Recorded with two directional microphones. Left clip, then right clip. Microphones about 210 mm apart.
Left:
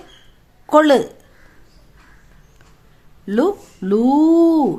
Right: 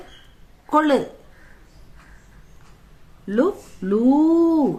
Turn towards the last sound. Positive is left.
turn(degrees=35)  # may be behind; listen again after turning